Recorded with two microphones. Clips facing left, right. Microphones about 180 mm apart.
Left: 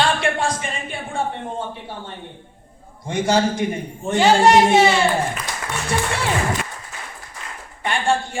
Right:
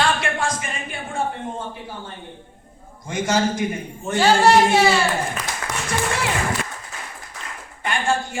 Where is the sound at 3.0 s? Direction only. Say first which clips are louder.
Left 2 dB; 30° left (ahead or behind).